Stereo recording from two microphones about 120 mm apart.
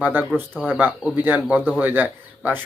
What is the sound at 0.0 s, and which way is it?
Speech, 15° right (ahead or behind).